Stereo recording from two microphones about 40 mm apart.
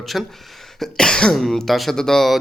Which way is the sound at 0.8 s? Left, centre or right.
Centre.